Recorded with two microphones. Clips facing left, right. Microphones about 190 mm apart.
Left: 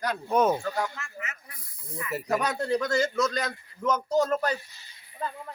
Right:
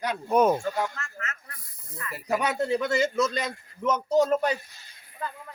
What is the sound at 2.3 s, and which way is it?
Speech, 5° right (ahead or behind).